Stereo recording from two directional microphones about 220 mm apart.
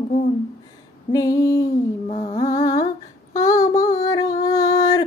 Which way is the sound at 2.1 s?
30° left (ahead or behind).